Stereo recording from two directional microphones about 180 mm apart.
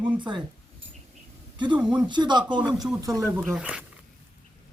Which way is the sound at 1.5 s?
25° right (ahead or behind).